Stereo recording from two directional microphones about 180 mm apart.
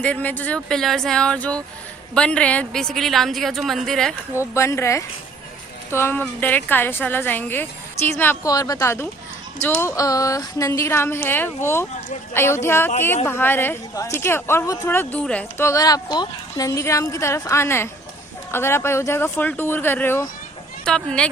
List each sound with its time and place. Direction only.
0.0 s a woman's voice: 10° left (ahead or behind)
4.5 s a woman's voice: 15° left (ahead or behind)